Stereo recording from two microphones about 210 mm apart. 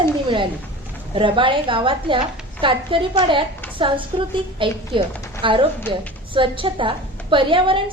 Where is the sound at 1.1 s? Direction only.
25° right (ahead or behind).